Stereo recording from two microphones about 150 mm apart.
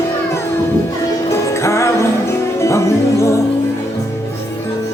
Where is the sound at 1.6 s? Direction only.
20° left (ahead or behind).